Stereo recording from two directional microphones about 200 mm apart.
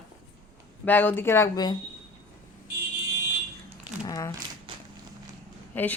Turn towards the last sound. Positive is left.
turn(degrees=10)  # may be behind; listen again after turning